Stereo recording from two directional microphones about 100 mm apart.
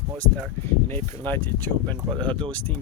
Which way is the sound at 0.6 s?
25° left (ahead or behind).